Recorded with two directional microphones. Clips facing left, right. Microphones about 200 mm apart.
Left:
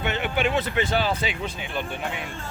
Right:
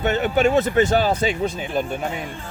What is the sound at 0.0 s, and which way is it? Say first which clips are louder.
Speech: right 7 dB; 40° right (ahead or behind).